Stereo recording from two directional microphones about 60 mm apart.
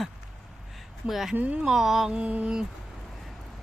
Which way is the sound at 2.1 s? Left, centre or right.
Right.